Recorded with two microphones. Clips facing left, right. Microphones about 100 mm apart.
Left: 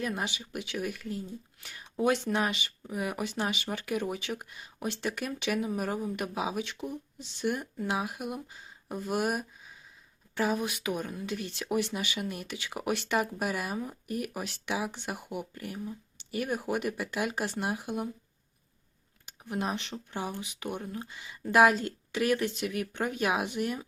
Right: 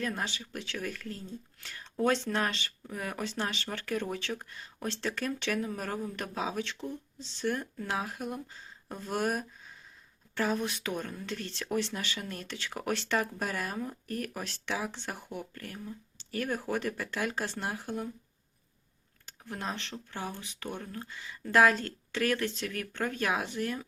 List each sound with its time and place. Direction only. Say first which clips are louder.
0.0 s speech: left 1 dB; 15° left (ahead or behind)
19.2 s speech: left 5 dB; 15° left (ahead or behind)